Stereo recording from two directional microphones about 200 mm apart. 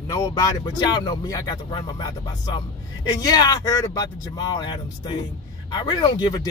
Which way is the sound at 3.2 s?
20° left (ahead or behind).